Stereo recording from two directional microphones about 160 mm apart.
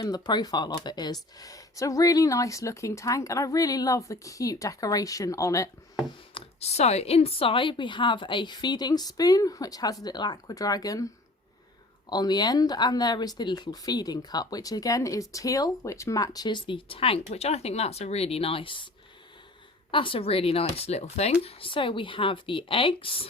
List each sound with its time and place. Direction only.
0.0 s speech: 25° left (ahead or behind)
6.3 s speech: 40° left (ahead or behind)
19.9 s speech: 30° left (ahead or behind)